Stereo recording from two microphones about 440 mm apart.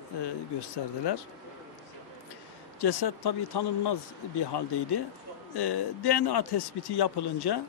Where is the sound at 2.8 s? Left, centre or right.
Left.